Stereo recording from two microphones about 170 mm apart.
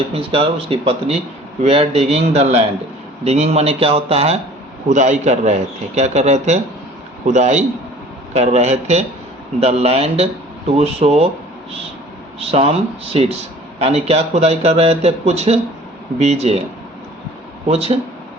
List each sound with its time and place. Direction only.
0.1 s a man's voice: 35° right (ahead or behind)
12.4 s speech: 35° right (ahead or behind)
17.7 s speech: 40° right (ahead or behind)